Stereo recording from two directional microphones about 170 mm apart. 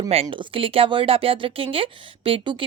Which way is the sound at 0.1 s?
35° right (ahead or behind).